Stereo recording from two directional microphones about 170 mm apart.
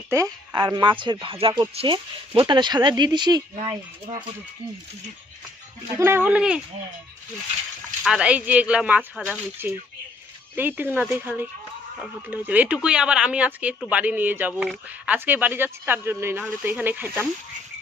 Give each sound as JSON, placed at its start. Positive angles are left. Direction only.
{"t": 0.1, "sound": "speech", "side_deg": -20}
{"t": 6.0, "sound": "speech", "side_deg": -15}
{"t": 8.0, "sound": "speech", "side_deg": -5}